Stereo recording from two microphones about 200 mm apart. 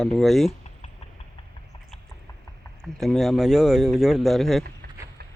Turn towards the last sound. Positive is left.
turn(degrees=0)  # may be behind; listen again after turning